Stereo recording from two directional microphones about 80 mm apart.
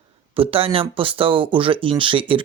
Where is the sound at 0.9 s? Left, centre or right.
Right.